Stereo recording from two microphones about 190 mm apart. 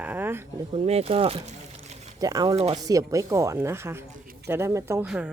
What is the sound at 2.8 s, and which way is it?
Speech, 15° right (ahead or behind).